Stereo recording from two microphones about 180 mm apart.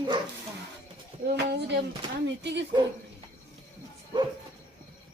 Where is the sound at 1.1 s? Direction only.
30° right (ahead or behind).